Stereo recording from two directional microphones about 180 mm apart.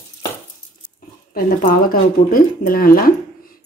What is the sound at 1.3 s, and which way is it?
Speech, 55° left (ahead or behind).